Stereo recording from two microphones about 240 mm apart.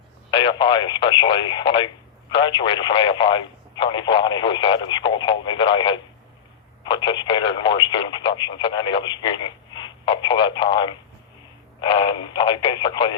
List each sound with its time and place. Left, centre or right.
0.3 s speech: centre